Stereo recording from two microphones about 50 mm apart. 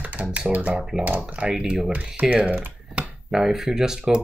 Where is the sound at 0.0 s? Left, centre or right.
Right.